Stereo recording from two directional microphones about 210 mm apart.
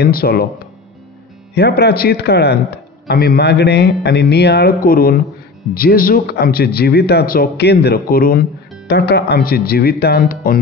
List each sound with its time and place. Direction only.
0.0 s a man's voice: 45° left (ahead or behind)
1.5 s a man's voice: 50° left (ahead or behind)